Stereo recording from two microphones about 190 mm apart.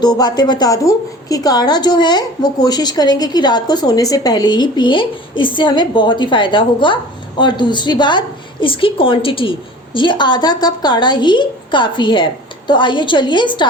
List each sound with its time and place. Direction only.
0.0 s a woman's voice: 20° left (ahead or behind)